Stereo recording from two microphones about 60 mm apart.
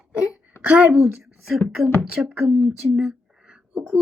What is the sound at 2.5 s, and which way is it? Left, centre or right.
Speech, centre.